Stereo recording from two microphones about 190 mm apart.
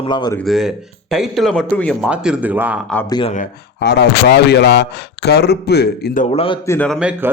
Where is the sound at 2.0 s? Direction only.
5° right (ahead or behind).